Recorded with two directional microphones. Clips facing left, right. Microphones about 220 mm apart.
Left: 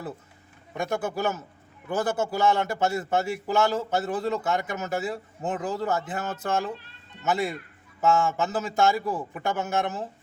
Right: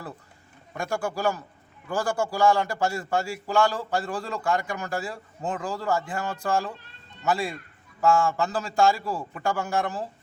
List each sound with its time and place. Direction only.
0.7 s a man's voice: 20° left (ahead or behind)